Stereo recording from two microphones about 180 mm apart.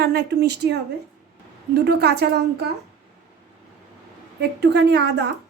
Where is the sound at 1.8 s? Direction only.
65° right (ahead or behind).